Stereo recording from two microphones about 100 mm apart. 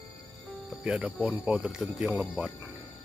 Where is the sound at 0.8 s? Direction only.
10° right (ahead or behind).